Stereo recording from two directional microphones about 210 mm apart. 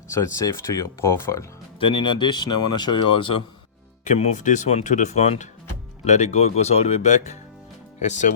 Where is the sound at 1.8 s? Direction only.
25° left (ahead or behind).